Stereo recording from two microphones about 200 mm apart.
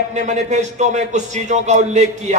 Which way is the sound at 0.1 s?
35° right (ahead or behind).